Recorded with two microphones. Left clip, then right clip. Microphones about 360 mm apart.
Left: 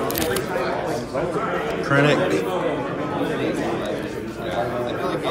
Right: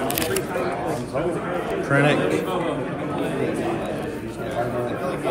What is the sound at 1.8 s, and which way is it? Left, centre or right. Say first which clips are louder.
Speech: left 1 dB; centre.